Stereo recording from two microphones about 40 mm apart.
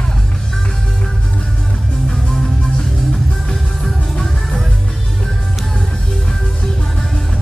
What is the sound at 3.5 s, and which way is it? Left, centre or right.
Music, centre.